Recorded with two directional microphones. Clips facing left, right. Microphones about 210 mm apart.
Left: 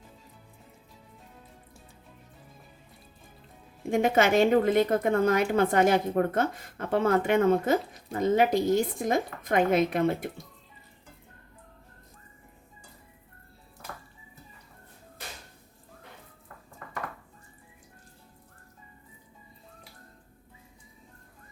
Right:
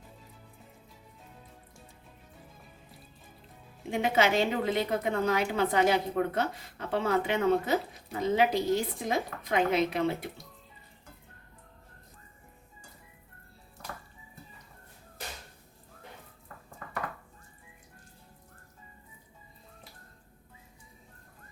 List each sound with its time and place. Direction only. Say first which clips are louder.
3.8 s a woman's voice: left 4 dB; 50° left (ahead or behind)